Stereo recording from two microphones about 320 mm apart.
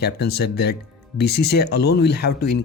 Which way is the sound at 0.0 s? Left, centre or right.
Left.